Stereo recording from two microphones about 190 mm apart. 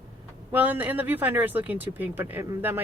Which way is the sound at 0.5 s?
10° right (ahead or behind).